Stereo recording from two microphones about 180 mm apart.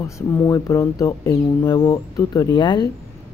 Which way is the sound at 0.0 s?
15° left (ahead or behind).